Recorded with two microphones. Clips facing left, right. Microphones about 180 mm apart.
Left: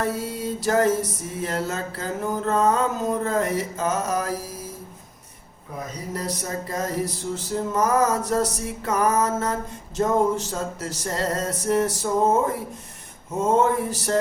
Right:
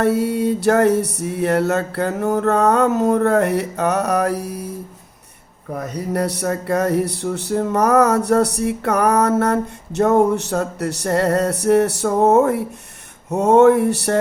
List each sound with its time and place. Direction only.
0.0 s music: 65° right (ahead or behind)
5.9 s music: 70° right (ahead or behind)